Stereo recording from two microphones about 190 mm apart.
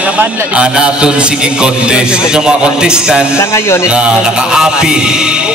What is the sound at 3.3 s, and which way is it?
Speech, 15° left (ahead or behind).